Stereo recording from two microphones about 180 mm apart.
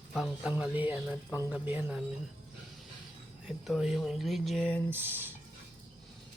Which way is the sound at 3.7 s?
Centre (ahead or behind).